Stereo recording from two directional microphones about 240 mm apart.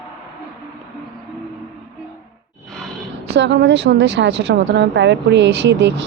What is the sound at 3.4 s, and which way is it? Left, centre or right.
Speech, right.